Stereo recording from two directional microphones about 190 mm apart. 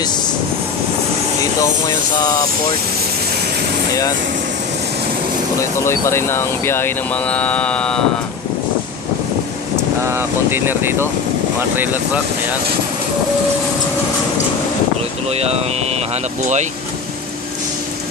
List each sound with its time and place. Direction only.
5.6 s speech: 15° left (ahead or behind)
10.0 s speech: 10° right (ahead or behind)
15.2 s speech: 35° right (ahead or behind)